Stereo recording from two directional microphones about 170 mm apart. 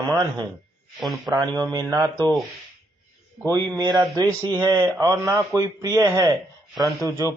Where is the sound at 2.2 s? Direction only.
Centre (ahead or behind).